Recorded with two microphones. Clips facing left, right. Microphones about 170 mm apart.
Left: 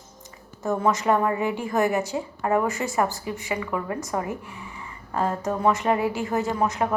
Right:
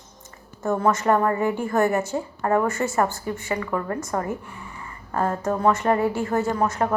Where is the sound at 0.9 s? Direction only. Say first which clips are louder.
Right 2 dB; 10° left (ahead or behind).